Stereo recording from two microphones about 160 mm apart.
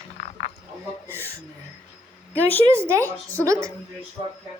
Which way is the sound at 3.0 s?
10° left (ahead or behind).